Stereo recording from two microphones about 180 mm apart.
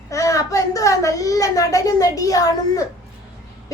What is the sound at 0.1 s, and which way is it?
A woman's voice, 20° left (ahead or behind).